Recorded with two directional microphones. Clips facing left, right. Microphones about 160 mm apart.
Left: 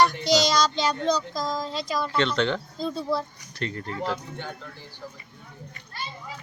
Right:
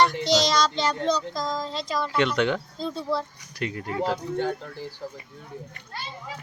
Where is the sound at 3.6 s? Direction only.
10° right (ahead or behind).